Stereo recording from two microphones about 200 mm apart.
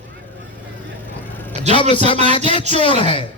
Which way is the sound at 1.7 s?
25° left (ahead or behind).